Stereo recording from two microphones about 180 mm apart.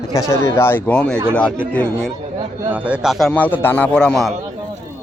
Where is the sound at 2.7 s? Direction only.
5° right (ahead or behind).